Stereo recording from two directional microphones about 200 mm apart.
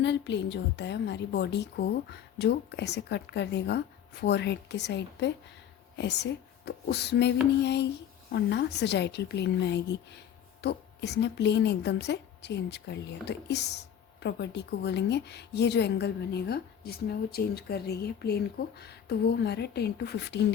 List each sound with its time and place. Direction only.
0.0 s a woman's voice: 60° left (ahead or behind)